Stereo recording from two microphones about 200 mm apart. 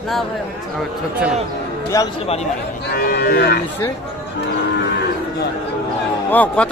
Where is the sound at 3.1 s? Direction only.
50° left (ahead or behind).